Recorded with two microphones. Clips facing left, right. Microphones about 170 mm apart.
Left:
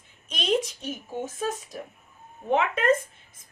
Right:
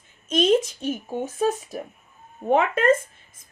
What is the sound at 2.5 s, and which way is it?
Speech, 45° right (ahead or behind).